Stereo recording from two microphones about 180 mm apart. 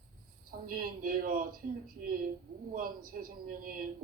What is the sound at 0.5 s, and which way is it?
Speech, 55° right (ahead or behind).